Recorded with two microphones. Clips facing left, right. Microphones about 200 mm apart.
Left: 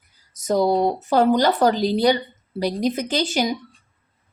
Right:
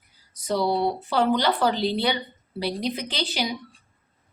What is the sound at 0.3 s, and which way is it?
Speech, 45° left (ahead or behind).